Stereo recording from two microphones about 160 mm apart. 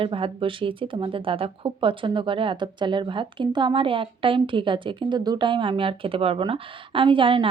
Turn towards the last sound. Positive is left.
turn(degrees=-35)  # may be behind; listen again after turning